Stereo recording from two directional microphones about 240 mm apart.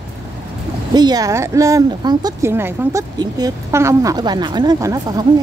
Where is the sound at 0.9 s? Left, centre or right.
Centre.